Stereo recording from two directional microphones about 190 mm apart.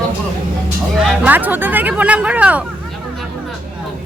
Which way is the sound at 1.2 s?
10° right (ahead or behind).